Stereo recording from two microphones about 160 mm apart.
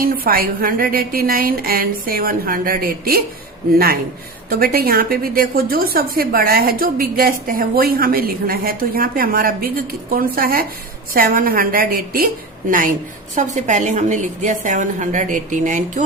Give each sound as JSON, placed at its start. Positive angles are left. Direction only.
{"t": 0.3, "sound": "a woman's voice", "side_deg": -65}
{"t": 4.4, "sound": "a woman's voice", "side_deg": -70}
{"t": 13.3, "sound": "a woman's voice", "side_deg": -50}